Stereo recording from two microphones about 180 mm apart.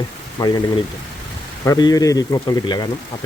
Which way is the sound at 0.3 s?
20° left (ahead or behind).